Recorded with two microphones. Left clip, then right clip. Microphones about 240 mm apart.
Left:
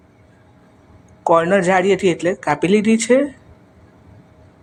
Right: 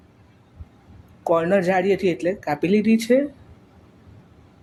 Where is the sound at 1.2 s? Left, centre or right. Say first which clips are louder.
Left 5 dB; centre.